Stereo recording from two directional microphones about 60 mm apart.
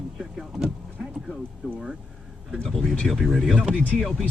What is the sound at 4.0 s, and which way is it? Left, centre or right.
Speech, centre.